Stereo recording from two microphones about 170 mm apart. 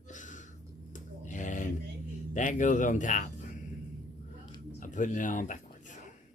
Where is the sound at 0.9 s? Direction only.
50° left (ahead or behind).